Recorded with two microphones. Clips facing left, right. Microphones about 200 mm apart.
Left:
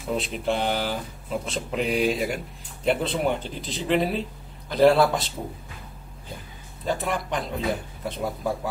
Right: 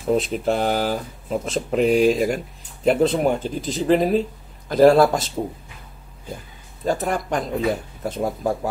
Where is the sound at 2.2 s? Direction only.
45° right (ahead or behind).